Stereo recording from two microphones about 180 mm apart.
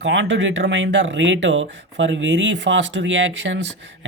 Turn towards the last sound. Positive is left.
turn(degrees=-90)